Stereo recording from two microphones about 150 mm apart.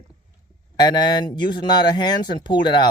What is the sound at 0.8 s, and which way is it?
Speech, 30° left (ahead or behind).